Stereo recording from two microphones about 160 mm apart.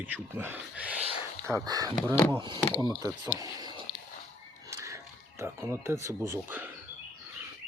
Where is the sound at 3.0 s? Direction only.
20° right (ahead or behind).